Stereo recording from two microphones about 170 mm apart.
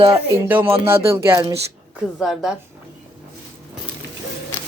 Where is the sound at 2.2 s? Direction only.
Centre (ahead or behind).